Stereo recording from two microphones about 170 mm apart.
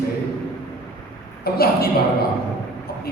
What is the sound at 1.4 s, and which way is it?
Speech, 65° left (ahead or behind).